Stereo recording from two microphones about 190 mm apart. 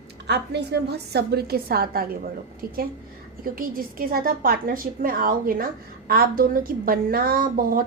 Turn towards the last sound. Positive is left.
turn(degrees=-50)  # may be behind; listen again after turning